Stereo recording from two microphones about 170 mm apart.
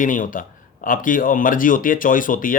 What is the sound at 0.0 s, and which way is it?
Speech, 50° left (ahead or behind).